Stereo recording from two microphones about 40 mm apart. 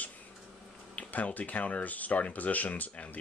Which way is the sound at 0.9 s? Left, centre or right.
Left.